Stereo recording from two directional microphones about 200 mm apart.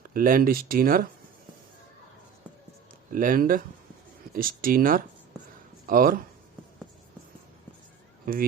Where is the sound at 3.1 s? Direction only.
45° right (ahead or behind).